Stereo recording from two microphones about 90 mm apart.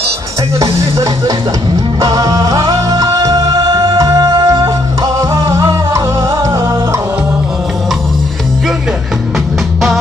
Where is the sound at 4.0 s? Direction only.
45° right (ahead or behind).